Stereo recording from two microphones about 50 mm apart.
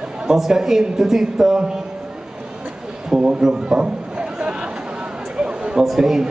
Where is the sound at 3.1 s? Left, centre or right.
Centre.